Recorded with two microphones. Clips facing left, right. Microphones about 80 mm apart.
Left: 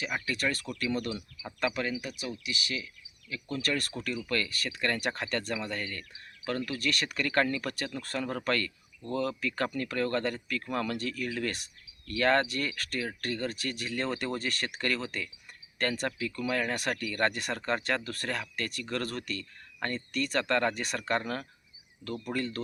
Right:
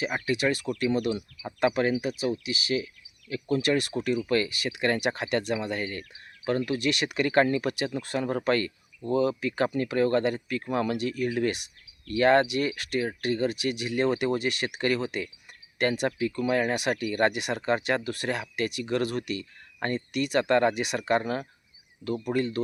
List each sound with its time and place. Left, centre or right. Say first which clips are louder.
0.3 s speech: right 9 dB; centre
1.7 s speech: right 8 dB; right
3.4 s speech: right 7 dB; right